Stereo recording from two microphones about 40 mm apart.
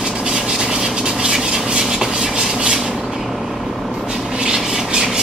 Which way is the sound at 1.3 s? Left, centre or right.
Centre.